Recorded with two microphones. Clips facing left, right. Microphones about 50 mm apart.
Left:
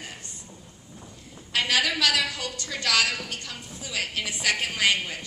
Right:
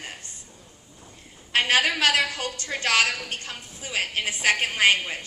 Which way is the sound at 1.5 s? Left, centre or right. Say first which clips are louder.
Right 3 dB; right.